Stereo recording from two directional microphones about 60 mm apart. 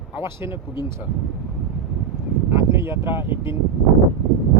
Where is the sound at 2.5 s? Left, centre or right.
Right.